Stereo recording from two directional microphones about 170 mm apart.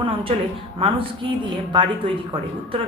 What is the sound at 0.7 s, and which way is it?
A woman's voice, 30° right (ahead or behind).